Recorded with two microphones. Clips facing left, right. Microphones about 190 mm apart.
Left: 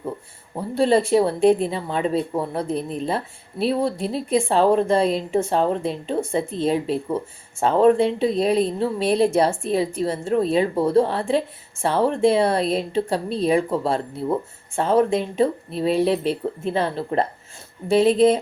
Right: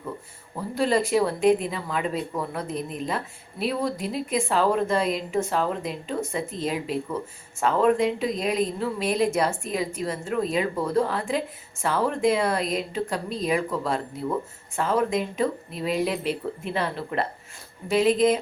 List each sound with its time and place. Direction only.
0.5 s speech: 30° left (ahead or behind)